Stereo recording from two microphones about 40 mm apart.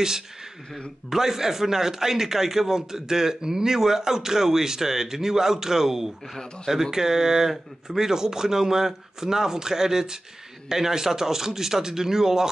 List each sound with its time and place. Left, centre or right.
1.1 s a man's voice: centre